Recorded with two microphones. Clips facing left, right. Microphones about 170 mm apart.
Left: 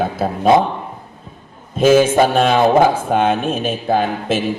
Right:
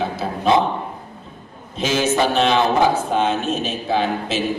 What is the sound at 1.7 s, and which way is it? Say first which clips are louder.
Speech: left 8 dB; 50° left (ahead or behind).